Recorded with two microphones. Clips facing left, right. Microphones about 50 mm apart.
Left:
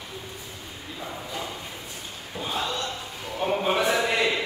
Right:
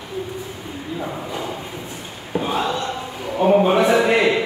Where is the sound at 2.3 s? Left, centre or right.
Right.